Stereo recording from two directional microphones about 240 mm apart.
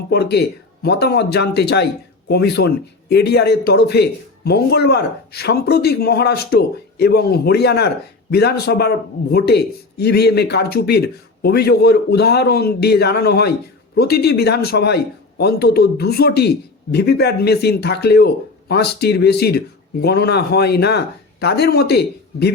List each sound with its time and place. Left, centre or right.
0.1 s a man's voice: left